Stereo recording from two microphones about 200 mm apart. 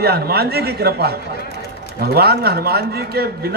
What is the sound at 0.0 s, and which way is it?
A man's voice, 50° right (ahead or behind).